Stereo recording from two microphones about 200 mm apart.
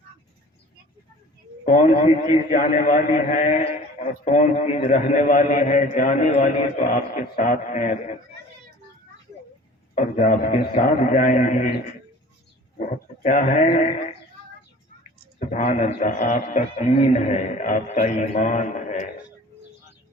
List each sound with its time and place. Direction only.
1.6 s a man's voice: 40° left (ahead or behind)
9.9 s a man's voice: 35° left (ahead or behind)
13.2 s a man's voice: 40° left (ahead or behind)
15.4 s a man's voice: 35° left (ahead or behind)